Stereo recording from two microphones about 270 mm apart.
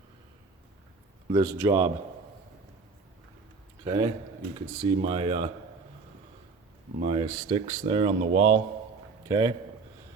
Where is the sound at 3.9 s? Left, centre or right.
Centre.